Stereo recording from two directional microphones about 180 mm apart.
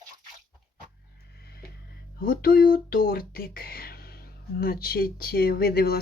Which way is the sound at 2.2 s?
55° left (ahead or behind).